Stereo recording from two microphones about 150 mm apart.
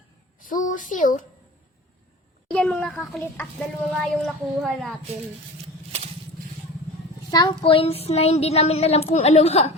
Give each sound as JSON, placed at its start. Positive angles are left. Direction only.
{"t": 0.3, "sound": "a woman's voice", "side_deg": 60}
{"t": 2.5, "sound": "speech", "side_deg": 5}
{"t": 7.3, "sound": "speech", "side_deg": 30}